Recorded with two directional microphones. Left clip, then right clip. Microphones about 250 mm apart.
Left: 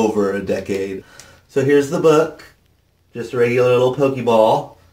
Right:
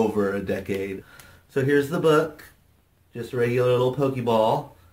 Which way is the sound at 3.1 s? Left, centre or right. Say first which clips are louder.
Left 7 dB; centre.